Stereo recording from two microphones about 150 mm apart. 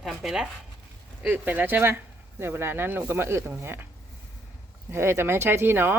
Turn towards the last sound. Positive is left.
turn(degrees=-15)  # may be behind; listen again after turning